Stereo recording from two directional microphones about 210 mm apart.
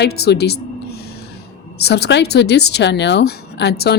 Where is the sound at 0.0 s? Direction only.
50° left (ahead or behind).